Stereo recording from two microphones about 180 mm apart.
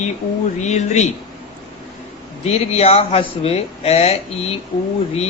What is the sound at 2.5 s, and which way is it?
Speech, 35° left (ahead or behind).